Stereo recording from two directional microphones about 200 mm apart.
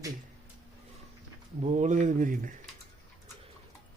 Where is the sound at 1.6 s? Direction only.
35° right (ahead or behind).